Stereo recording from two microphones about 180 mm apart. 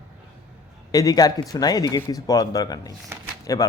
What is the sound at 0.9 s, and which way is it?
A man's voice, 20° left (ahead or behind).